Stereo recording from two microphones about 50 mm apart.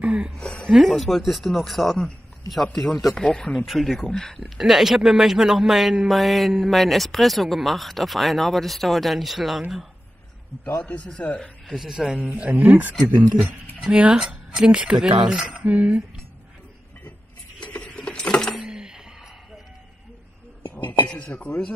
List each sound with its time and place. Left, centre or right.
0.0 s a sound: right
0.4 s a sound: left
0.8 s a man's voice: centre
3.2 s speech: centre
3.6 s a man's voice: centre
4.4 s a man's voice: centre
10.8 s speech: left
11.7 s speech: centre
12.2 s a man's voice: right
13.8 s speech: centre
15.6 s speech: right
17.6 s a sound: left
18.7 s a sound: centre
21.2 s speech: left